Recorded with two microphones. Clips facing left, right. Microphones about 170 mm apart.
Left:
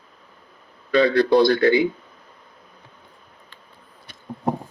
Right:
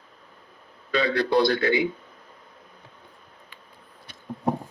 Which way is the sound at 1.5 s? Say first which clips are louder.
Left 6 dB; 40° left (ahead or behind).